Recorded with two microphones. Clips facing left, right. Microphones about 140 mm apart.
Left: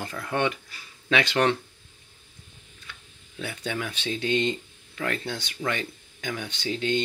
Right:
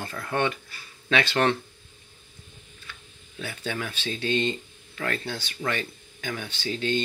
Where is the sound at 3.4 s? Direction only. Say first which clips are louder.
Left 1 dB; 15° left (ahead or behind).